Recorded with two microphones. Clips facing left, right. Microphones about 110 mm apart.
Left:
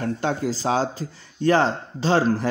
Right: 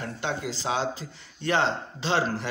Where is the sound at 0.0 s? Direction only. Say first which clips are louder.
Left 7 dB; 40° left (ahead or behind).